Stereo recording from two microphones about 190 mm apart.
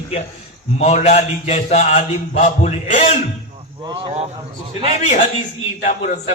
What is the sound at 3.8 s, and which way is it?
Speech, 20° right (ahead or behind).